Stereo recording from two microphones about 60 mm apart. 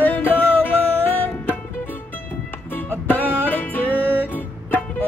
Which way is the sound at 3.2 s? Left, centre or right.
Right.